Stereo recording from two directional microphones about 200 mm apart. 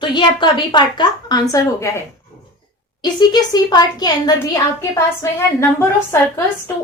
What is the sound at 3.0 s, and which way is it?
A woman's voice, 20° left (ahead or behind).